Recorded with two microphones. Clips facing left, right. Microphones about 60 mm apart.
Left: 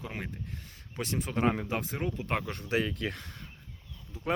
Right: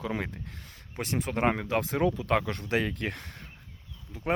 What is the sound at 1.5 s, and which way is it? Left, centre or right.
Speech, right.